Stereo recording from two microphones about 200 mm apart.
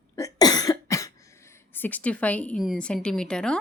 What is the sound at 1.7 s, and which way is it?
Speech, 10° left (ahead or behind).